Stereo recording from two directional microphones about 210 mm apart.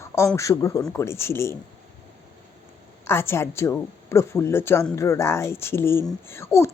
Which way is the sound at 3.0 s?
10° left (ahead or behind).